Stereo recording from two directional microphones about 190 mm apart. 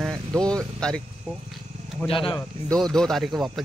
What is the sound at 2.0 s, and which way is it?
Speech, 25° left (ahead or behind).